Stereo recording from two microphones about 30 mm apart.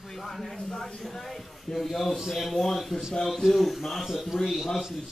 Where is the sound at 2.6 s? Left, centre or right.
Centre.